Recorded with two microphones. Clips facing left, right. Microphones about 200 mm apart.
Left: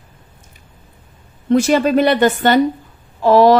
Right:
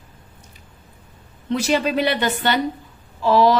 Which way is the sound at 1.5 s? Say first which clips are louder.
Left 7 dB; 50° left (ahead or behind).